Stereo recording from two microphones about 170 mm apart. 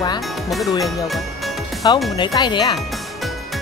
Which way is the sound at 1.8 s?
25° left (ahead or behind).